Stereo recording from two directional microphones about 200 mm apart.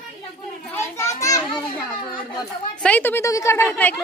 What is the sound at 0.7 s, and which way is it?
A woman's voice, 10° left (ahead or behind).